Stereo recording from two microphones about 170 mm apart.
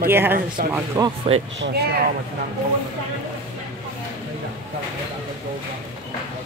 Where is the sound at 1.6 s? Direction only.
70° right (ahead or behind).